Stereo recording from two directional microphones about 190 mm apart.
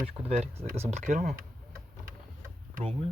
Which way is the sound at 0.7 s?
35° right (ahead or behind).